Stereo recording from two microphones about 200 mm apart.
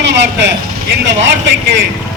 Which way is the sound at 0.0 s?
60° right (ahead or behind).